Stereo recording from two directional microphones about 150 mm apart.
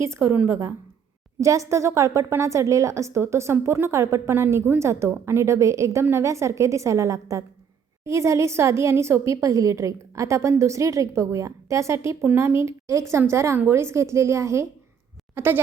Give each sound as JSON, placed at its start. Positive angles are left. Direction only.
{"t": 0.0, "sound": "a woman's voice", "side_deg": -15}